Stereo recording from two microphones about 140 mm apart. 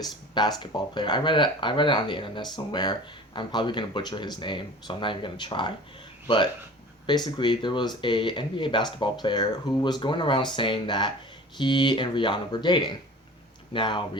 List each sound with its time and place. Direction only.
0.0 s speech: 30° left (ahead or behind)